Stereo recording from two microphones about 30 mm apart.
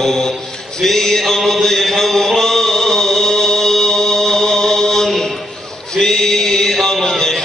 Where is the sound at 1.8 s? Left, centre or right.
Centre.